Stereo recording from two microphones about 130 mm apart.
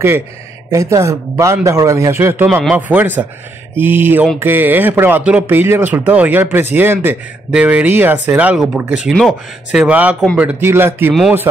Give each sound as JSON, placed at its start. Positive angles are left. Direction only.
{"t": 0.7, "sound": "speech", "side_deg": -25}